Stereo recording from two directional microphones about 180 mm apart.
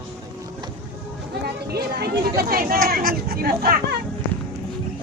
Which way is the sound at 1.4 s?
65° right (ahead or behind).